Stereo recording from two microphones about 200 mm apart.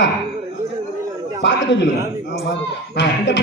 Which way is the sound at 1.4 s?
60° left (ahead or behind).